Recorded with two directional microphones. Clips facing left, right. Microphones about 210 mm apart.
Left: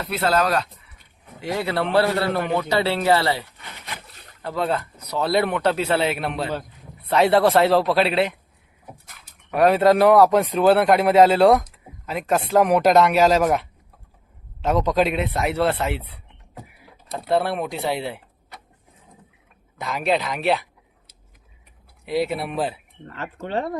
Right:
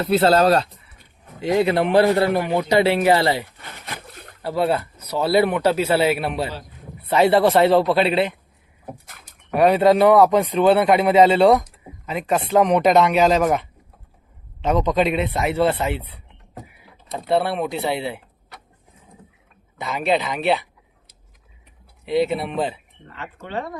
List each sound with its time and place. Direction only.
0.0 s a man's voice: 30° right (ahead or behind)
4.4 s speech: 10° right (ahead or behind)
9.5 s speech: centre (ahead or behind)
17.2 s speech: centre (ahead or behind)
19.8 s speech: centre (ahead or behind)
22.0 s speech: centre (ahead or behind)
23.1 s speech: 40° left (ahead or behind)